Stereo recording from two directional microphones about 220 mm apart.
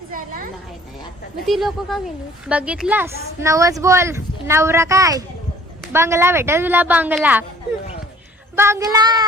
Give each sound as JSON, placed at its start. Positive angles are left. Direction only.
{"t": 1.5, "sound": "speech", "side_deg": 0}
{"t": 8.5, "sound": "speech", "side_deg": -10}